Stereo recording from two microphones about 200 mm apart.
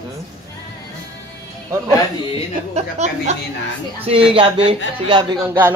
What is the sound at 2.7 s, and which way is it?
A woman's voice, 35° right (ahead or behind).